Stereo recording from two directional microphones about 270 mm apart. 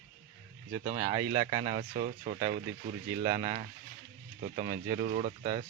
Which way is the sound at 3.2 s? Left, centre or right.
Right.